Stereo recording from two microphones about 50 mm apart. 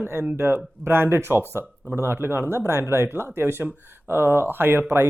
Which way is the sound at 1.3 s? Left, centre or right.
Left.